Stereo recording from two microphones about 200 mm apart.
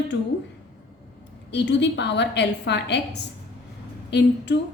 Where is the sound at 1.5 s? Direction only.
60° left (ahead or behind).